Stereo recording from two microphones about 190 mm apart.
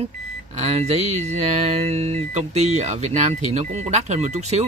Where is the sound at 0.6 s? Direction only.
35° right (ahead or behind).